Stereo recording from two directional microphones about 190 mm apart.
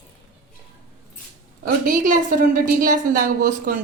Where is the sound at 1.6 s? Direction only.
50° right (ahead or behind).